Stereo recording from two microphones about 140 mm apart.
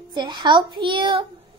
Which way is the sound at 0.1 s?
30° right (ahead or behind).